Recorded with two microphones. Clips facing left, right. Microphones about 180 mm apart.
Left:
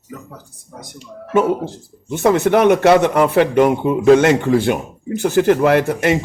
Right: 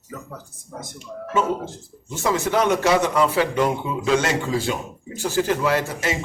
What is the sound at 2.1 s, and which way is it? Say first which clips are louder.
A man's voice: left 8 dB; 60° left (ahead or behind).